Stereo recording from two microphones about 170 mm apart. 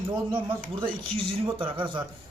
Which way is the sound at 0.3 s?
30° right (ahead or behind).